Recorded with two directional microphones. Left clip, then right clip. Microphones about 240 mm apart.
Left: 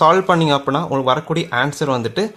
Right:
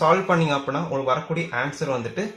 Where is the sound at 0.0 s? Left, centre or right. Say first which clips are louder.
Left 6 dB; left.